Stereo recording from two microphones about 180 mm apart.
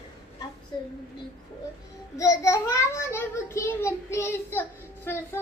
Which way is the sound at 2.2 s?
15° left (ahead or behind).